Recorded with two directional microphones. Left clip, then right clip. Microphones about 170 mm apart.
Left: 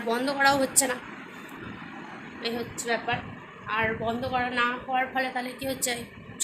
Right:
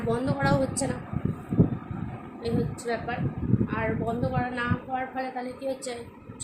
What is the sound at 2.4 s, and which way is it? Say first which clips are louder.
A woman's voice: right 2 dB; 10° right (ahead or behind).